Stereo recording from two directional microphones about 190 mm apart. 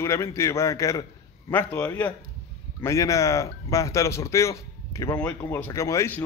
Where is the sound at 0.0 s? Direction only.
15° left (ahead or behind).